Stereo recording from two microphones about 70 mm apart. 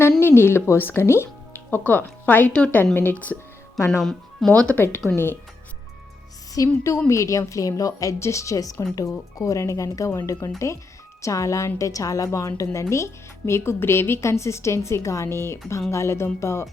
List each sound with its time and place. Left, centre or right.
0.2 s speech: left
4.0 s speech: centre
4.7 s speech: left
6.5 s a woman's voice: left